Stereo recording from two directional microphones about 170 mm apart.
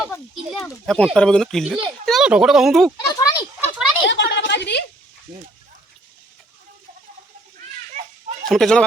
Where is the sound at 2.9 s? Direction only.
20° left (ahead or behind).